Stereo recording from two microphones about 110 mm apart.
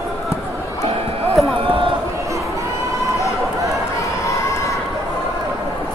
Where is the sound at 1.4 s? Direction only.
Centre (ahead or behind).